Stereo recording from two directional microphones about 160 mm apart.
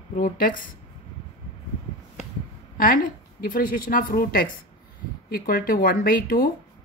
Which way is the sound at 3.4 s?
60° left (ahead or behind).